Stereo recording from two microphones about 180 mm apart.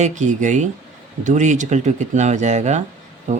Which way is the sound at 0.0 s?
40° right (ahead or behind).